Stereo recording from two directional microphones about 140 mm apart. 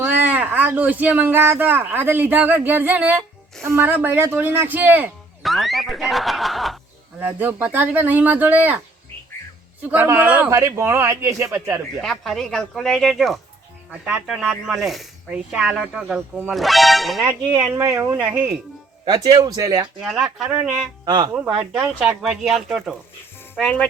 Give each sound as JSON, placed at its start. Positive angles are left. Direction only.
{"t": 0.0, "sound": "speech", "side_deg": -15}
{"t": 5.4, "sound": "speech", "side_deg": 0}
{"t": 7.2, "sound": "speech", "side_deg": -10}
{"t": 9.9, "sound": "speech", "side_deg": -15}
{"t": 10.5, "sound": "speech", "side_deg": -20}
{"t": 12.0, "sound": "speech", "side_deg": 0}
{"t": 17.2, "sound": "speech", "side_deg": -20}
{"t": 19.0, "sound": "speech", "side_deg": -25}
{"t": 20.0, "sound": "speech", "side_deg": -5}
{"t": 21.0, "sound": "speech", "side_deg": -30}
{"t": 21.3, "sound": "speech", "side_deg": -5}
{"t": 23.6, "sound": "speech", "side_deg": 10}